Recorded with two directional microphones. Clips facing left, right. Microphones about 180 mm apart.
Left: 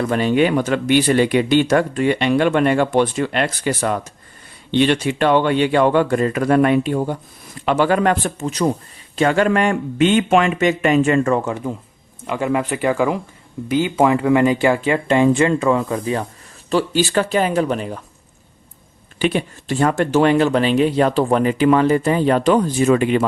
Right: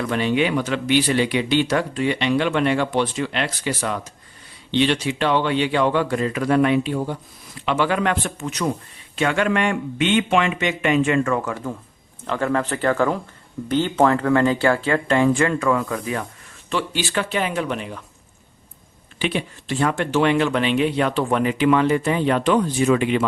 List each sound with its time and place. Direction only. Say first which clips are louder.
0.0 s speech: left 4 dB; 45° left (ahead or behind); by 11.7 s 25° left (ahead or behind)
12.2 s speech: left 2 dB; 10° left (ahead or behind); by 16.2 s 25° left (ahead or behind)
16.6 s speech: left 7 dB; 40° left (ahead or behind)
19.2 s speech: left 5 dB; 45° left (ahead or behind)